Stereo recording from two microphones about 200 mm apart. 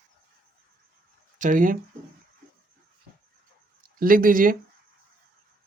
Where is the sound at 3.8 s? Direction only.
45° right (ahead or behind).